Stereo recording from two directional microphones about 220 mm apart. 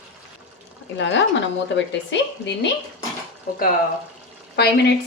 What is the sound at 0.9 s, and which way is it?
A woman's voice, 55° left (ahead or behind).